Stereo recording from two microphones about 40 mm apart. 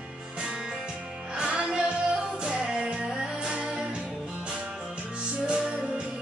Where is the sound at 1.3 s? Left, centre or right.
Right.